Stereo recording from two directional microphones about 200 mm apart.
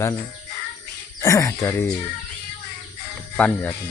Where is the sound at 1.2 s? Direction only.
15° left (ahead or behind).